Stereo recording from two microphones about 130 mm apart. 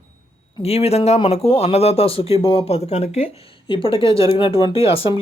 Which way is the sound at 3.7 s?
40° left (ahead or behind).